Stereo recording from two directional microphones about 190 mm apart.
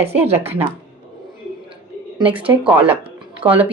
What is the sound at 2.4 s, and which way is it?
Speech, 5° right (ahead or behind).